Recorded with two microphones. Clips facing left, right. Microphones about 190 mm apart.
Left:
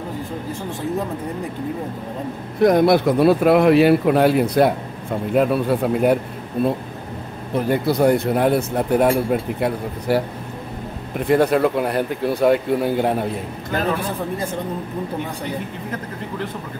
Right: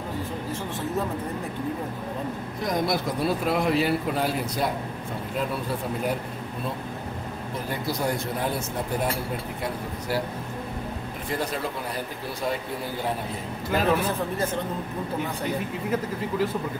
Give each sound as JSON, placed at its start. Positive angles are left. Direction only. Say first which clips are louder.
{"t": 2.6, "sound": "speech", "louder": "left 12 dB", "side_deg": 65}
{"t": 7.5, "sound": "speech", "louder": "left 12 dB", "side_deg": 65}
{"t": 11.2, "sound": "speech", "louder": "left 14 dB", "side_deg": 65}